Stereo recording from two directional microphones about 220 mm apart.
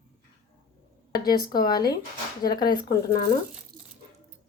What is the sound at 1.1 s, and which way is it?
A woman's voice, 20° left (ahead or behind).